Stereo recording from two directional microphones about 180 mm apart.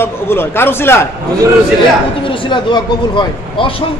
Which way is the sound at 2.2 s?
25° left (ahead or behind).